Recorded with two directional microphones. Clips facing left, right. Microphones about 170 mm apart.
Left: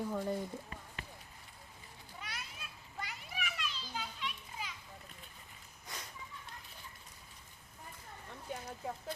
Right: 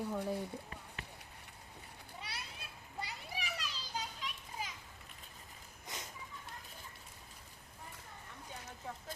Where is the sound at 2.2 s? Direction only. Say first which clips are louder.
Left 1 dB; 30° right (ahead or behind).